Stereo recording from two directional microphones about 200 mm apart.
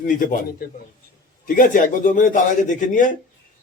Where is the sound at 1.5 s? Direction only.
40° left (ahead or behind).